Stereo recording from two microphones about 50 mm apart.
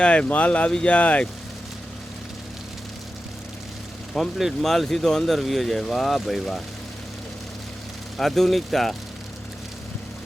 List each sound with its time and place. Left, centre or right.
0.0 s speech: left
4.2 s speech: centre
4.6 s speech: centre
8.2 s speech: centre